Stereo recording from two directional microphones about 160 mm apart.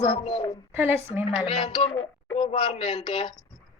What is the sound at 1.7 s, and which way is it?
Speech, 35° left (ahead or behind).